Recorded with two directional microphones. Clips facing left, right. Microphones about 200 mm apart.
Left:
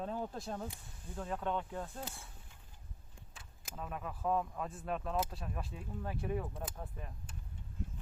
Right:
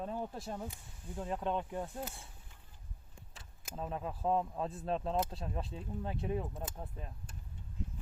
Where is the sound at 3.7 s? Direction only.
30° right (ahead or behind).